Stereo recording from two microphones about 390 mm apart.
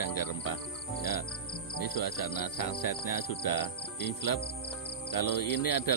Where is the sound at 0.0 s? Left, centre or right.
Left.